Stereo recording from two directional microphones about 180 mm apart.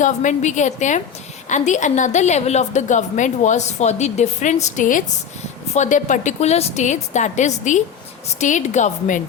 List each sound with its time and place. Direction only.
0.0 s a woman's voice: 45° left (ahead or behind)